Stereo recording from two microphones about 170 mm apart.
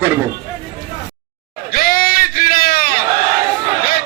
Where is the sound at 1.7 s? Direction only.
60° left (ahead or behind).